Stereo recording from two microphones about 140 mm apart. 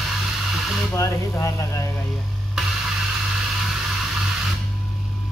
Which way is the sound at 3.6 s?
5° right (ahead or behind).